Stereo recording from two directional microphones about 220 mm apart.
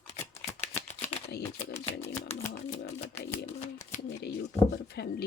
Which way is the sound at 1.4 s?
25° left (ahead or behind).